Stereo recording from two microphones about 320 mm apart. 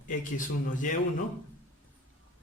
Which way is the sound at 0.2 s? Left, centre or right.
Left.